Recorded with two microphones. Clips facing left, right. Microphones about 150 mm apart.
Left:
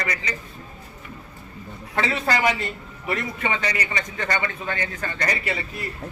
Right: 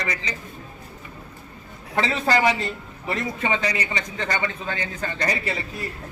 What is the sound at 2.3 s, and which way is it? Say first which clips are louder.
A man's voice: right 3 dB; 30° right (ahead or behind).